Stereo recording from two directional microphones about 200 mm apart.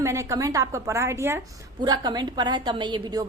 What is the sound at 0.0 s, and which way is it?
A woman's voice, 15° right (ahead or behind).